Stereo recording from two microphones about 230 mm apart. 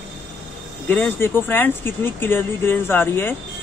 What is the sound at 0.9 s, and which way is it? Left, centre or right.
Speech, centre.